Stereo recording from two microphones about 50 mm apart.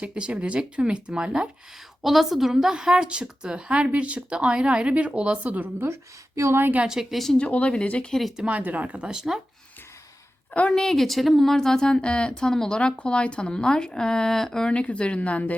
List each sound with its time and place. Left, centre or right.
0.0 s a woman's voice: right
2.0 s a woman's voice: centre; by 5.6 s right
5.8 s speech: right
6.8 s a woman's voice: centre
7.3 s speech: left
8.4 s a woman's voice: right
9.0 s a woman's voice: centre
10.5 s a woman's voice: left
10.8 s a woman's voice: centre
12.8 s speech: left